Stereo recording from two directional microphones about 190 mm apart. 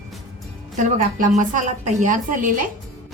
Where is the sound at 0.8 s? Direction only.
40° right (ahead or behind).